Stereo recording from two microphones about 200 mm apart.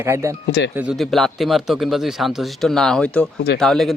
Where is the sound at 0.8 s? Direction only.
5° right (ahead or behind).